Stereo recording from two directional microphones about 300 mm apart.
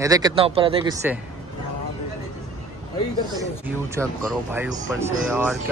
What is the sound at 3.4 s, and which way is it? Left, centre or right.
Speech, centre.